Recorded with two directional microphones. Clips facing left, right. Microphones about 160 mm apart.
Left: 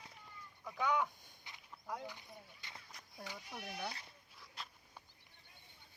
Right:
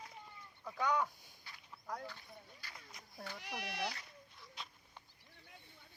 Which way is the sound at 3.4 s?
85° right.